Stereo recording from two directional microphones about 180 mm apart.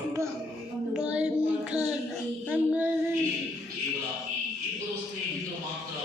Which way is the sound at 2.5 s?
10° right (ahead or behind).